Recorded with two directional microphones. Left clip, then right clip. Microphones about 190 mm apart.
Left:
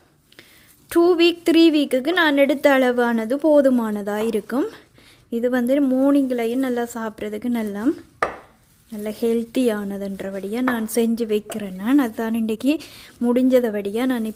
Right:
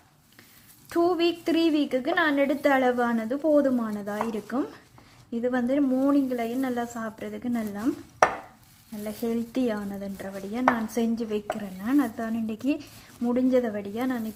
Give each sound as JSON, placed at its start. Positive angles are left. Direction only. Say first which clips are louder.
{"t": 0.9, "sound": "a woman's voice", "louder": "left 8 dB", "side_deg": 50}
{"t": 9.0, "sound": "a woman's voice", "louder": "left 9 dB", "side_deg": 55}